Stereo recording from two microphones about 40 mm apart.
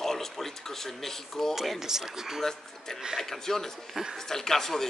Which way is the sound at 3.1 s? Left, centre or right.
Centre.